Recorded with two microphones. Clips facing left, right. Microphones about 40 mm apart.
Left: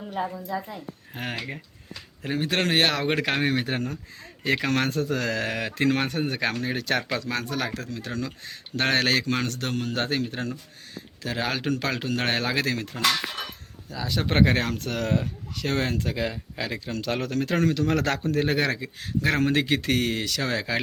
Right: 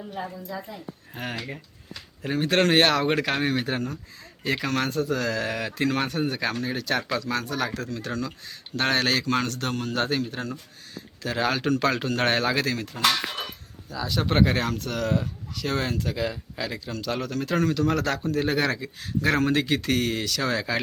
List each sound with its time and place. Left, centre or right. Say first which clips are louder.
0.1 s speech: left 6 dB; left
2.2 s speech: right 3 dB; centre
3.1 s speech: even; centre
4.4 s speech: left 2 dB; left
4.9 s speech: even; left
5.1 s speech: even; left
7.3 s speech: right 1 dB; centre
11.2 s speech: right 3 dB; centre
12.5 s speech: even; centre
13.9 s speech: even; centre; by 17.8 s left
17.9 s speech: left 1 dB; left
18.3 s speech: even; left
18.6 s speech: even; centre